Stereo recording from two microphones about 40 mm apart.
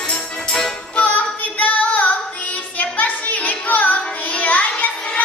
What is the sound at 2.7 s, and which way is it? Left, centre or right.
Music, left.